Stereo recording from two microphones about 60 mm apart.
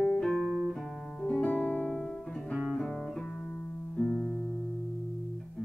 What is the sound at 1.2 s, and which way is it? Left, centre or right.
Music, centre.